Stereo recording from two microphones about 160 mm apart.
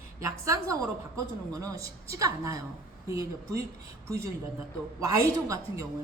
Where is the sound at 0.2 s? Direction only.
20° right (ahead or behind).